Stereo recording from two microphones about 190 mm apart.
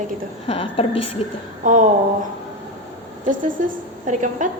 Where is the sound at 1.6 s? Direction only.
40° right (ahead or behind).